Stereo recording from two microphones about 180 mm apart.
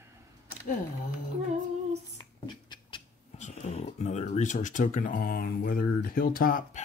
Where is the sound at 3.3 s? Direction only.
40° left (ahead or behind).